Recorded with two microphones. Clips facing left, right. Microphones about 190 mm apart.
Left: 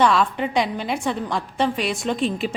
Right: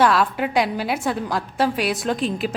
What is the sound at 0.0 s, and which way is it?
A woman's voice, 5° right (ahead or behind).